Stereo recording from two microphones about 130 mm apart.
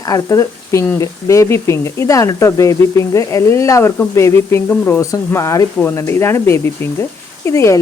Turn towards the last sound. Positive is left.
turn(degrees=25)  # may be behind; listen again after turning